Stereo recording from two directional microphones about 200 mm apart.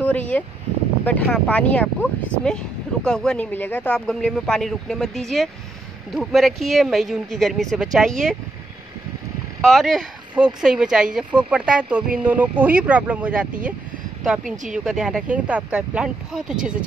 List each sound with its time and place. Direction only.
0.0 s a sound: 10° left (ahead or behind)
1.0 s speech: 5° left (ahead or behind)
9.6 s speech: centre (ahead or behind)
14.4 s speech: 40° right (ahead or behind)
14.9 s speech: centre (ahead or behind)